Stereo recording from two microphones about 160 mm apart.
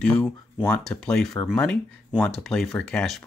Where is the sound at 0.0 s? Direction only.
5° left (ahead or behind).